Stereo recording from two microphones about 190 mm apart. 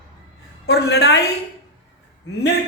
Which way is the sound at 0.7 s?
60° left (ahead or behind).